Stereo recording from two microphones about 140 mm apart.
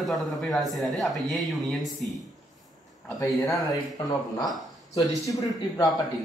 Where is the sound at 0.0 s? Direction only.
Centre (ahead or behind).